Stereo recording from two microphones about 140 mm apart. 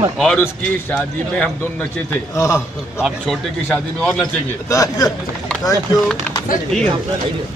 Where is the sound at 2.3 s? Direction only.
20° left (ahead or behind).